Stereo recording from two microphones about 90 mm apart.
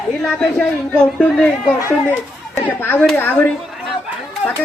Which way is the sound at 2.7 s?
20° left (ahead or behind).